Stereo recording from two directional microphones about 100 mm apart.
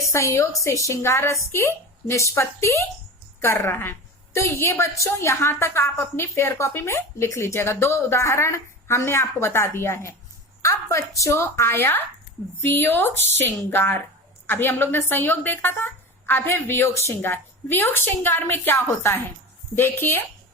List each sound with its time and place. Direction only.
0.0 s a woman's voice: 30° left (ahead or behind)